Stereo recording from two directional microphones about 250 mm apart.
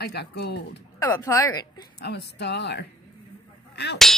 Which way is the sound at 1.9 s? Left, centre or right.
Left.